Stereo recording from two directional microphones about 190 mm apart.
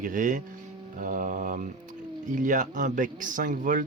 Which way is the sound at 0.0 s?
45° right (ahead or behind).